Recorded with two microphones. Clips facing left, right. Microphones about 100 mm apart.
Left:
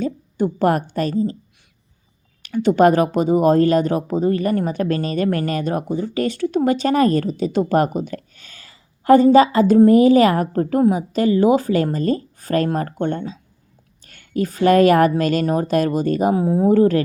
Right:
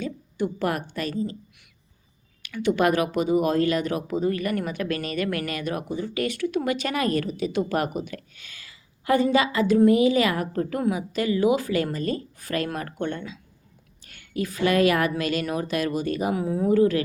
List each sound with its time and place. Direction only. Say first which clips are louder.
0.0 s a woman's voice: left 7 dB; 40° left (ahead or behind)
2.4 s speech: left 8 dB; 35° left (ahead or behind)